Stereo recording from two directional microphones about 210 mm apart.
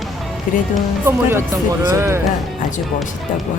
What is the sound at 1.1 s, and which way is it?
Speech, 10° right (ahead or behind).